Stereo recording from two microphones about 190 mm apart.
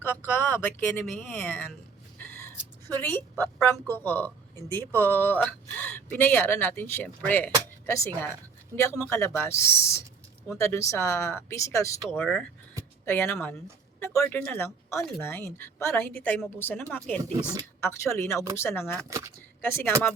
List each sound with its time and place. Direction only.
0.0 s speech: 10° left (ahead or behind)
2.8 s a woman's voice: 10° left (ahead or behind)
17.3 s speech: 20° right (ahead or behind)
17.7 s a woman's voice: 15° left (ahead or behind)